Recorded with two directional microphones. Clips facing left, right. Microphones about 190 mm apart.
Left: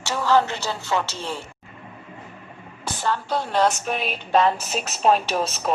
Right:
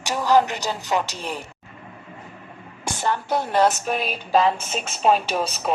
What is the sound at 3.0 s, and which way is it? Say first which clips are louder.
Speech: right 1 dB; 15° right (ahead or behind).